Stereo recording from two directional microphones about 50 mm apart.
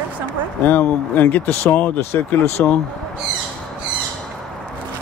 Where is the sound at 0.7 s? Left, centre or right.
Left.